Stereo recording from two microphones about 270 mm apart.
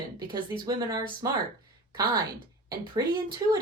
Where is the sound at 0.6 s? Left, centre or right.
Centre.